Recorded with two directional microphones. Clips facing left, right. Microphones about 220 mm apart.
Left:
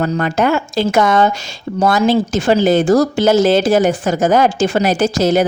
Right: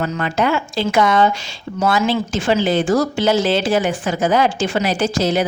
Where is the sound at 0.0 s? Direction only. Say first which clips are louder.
Left 4 dB; 45° left (ahead or behind).